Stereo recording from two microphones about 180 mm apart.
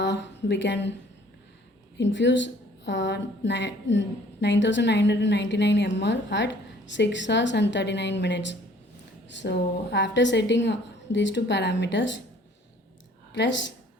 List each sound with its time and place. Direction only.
0.0 s a woman's voice: 75° left (ahead or behind)
2.0 s a woman's voice: 80° left
13.4 s speech: 90° left